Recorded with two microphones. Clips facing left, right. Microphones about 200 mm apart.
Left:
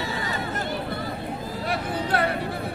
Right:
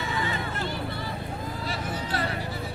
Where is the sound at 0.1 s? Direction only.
40° left (ahead or behind).